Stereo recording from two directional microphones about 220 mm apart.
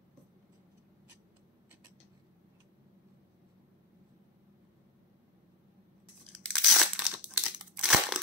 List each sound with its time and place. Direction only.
6.3 s crumpling: 5° left (ahead or behind)